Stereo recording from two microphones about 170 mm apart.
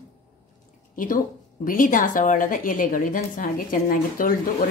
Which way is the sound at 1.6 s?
55° left (ahead or behind).